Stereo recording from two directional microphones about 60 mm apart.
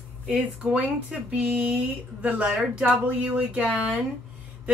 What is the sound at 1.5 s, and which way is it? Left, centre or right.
Speech, right.